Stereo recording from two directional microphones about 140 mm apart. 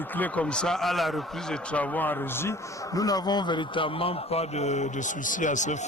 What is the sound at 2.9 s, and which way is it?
A man's voice, 25° left (ahead or behind).